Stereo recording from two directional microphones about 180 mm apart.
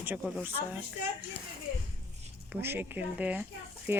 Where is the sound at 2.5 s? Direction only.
10° right (ahead or behind).